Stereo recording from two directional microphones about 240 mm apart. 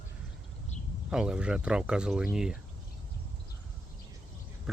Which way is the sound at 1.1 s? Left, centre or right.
Centre.